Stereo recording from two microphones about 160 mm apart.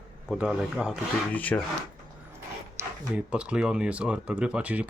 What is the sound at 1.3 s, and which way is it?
Speech, 10° left (ahead or behind).